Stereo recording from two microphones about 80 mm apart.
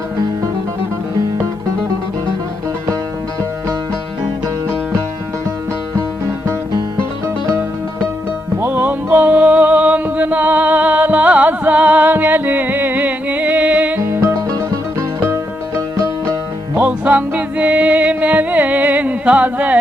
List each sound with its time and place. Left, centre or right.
8.6 s music: right
14.0 s music: right
16.7 s music: centre